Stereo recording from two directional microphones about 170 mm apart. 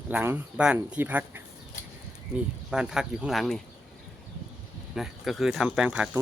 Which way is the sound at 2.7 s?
5° right (ahead or behind).